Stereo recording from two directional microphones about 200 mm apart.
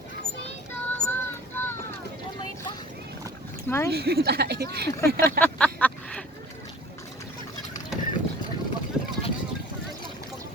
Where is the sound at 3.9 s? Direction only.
50° right (ahead or behind).